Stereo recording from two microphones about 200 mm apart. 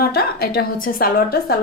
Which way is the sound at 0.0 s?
50° left (ahead or behind).